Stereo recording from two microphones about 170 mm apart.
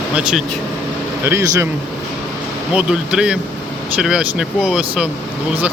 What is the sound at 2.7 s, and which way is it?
Speech, 5° right (ahead or behind).